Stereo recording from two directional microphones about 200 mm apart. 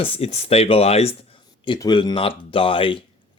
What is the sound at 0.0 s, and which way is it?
Speech, 30° left (ahead or behind).